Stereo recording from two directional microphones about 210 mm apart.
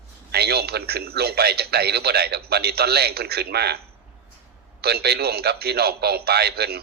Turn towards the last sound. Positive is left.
turn(degrees=-50)  # may be behind; listen again after turning